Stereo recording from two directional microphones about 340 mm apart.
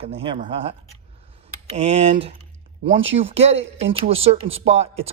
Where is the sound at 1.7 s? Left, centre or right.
Centre.